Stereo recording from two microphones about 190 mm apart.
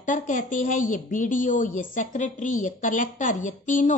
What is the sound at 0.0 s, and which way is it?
A woman's voice, 40° left (ahead or behind).